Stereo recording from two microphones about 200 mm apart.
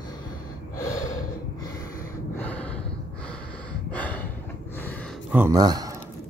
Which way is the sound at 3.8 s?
5° left (ahead or behind).